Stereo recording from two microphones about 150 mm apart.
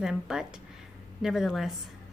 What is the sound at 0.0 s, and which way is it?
A woman's voice, 5° right (ahead or behind).